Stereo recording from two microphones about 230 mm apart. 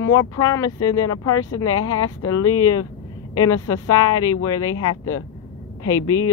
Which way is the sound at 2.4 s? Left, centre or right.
Left.